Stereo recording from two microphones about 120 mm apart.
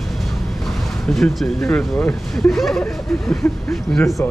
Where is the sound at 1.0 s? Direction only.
5° left (ahead or behind).